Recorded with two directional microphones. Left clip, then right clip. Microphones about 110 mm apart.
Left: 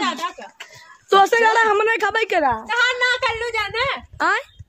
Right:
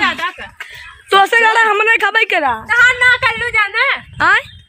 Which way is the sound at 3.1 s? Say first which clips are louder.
Right 7 dB; 10° left (ahead or behind).